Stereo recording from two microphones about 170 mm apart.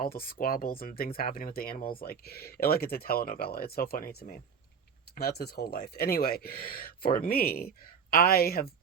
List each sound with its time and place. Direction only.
0.0 s speech: 60° left (ahead or behind)